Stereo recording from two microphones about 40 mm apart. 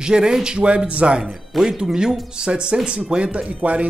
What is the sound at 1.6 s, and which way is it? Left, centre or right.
A man's voice, centre.